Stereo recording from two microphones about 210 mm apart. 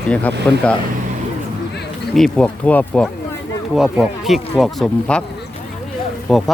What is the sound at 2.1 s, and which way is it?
Speech, 5° left (ahead or behind).